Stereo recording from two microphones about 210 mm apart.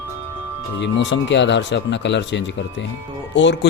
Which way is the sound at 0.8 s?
60° left (ahead or behind).